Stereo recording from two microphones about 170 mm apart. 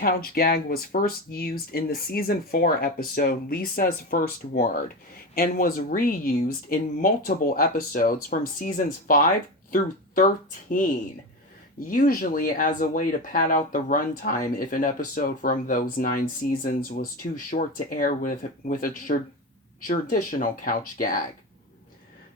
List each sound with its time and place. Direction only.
0.0 s speech: 60° left (ahead or behind)
11.9 s speech: 55° left (ahead or behind)